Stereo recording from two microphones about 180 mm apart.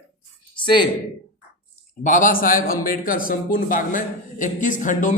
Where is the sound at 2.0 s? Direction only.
45° left (ahead or behind).